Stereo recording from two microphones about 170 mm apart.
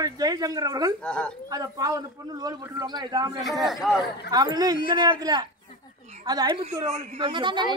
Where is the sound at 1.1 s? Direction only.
5° left (ahead or behind).